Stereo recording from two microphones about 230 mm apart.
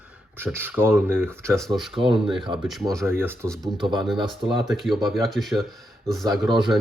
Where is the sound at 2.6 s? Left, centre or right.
Centre.